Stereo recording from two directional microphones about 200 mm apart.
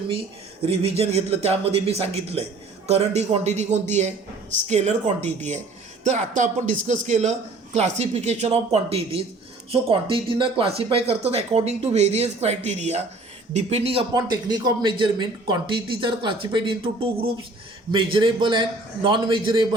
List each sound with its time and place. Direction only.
0.6 s a man's voice: 30° right (ahead or behind)